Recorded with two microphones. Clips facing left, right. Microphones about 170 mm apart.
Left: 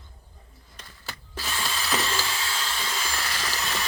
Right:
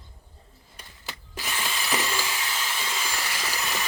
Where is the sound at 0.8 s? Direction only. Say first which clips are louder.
Even; 15° right (ahead or behind).